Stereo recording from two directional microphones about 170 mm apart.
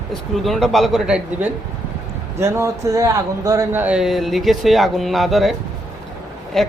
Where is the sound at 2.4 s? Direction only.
15° right (ahead or behind); by 5.5 s centre (ahead or behind).